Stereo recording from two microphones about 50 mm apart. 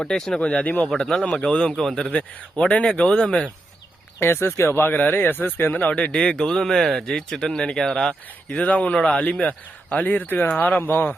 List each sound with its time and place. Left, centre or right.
0.0 s speech: centre
0.3 s speech: left
0.9 s speech: centre
1.7 s speech: centre
2.1 s speech: left
4.2 s speech: left
4.8 s speech: left
5.8 s speech: left
8.6 s speech: left